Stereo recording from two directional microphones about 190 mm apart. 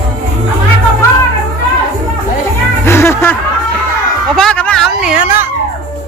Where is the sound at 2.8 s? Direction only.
15° left (ahead or behind).